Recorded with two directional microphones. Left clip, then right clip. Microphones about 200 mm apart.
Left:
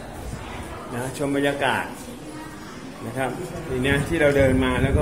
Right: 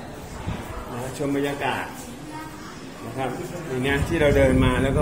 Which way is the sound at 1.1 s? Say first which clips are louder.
Left 3 dB; 30° left (ahead or behind).